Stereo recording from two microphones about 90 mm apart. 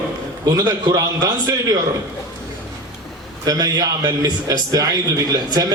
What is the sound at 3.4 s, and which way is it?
A man's voice, 45° right (ahead or behind).